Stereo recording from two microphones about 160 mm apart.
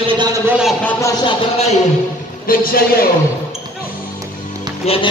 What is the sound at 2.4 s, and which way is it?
Speech, 65° left (ahead or behind).